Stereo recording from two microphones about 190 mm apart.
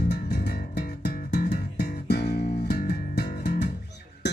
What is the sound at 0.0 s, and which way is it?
Music, 55° left (ahead or behind).